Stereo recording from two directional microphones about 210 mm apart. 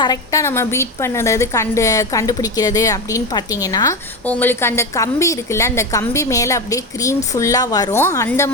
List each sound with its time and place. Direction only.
0.0 s a woman's voice: 15° left (ahead or behind)